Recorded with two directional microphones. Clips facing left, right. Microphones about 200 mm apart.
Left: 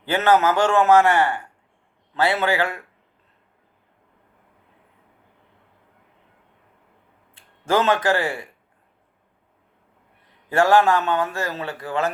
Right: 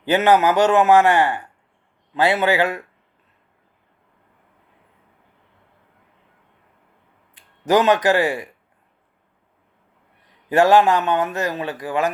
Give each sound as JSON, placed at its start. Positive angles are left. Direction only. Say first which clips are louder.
{"t": 0.0, "sound": "a man's voice", "louder": "right 2 dB", "side_deg": -15}
{"t": 7.7, "sound": "a man's voice", "louder": "right 3 dB", "side_deg": -15}
{"t": 10.5, "sound": "a man's voice", "louder": "right 2 dB", "side_deg": -20}